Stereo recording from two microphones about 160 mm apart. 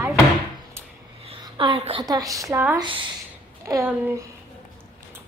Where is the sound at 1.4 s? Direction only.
30° right (ahead or behind).